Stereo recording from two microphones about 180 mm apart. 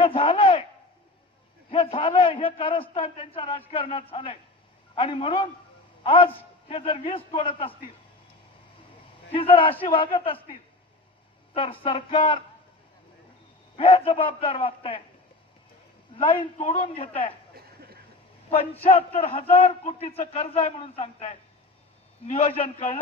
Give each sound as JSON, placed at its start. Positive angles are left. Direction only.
{"t": 0.0, "sound": "a sound", "side_deg": 30}
{"t": 1.7, "sound": "a man's voice", "side_deg": 30}
{"t": 9.3, "sound": "a man's voice", "side_deg": 30}
{"t": 11.5, "sound": "a man's voice", "side_deg": 30}
{"t": 13.7, "sound": "a man's voice", "side_deg": 30}
{"t": 16.2, "sound": "a man's voice", "side_deg": 35}
{"t": 17.6, "sound": "a sound", "side_deg": -60}
{"t": 18.5, "sound": "a man's voice", "side_deg": 35}